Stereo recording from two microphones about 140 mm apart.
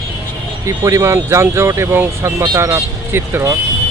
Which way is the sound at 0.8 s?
20° right (ahead or behind).